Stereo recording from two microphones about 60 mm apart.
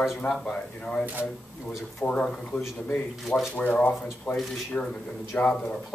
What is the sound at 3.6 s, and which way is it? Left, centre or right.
Speech, left.